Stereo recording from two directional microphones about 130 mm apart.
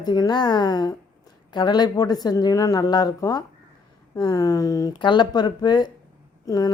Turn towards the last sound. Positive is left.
turn(degrees=30)  # may be behind; listen again after turning